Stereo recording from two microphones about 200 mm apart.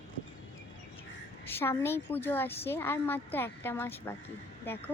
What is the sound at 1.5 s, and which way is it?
A woman's voice, 10° left (ahead or behind).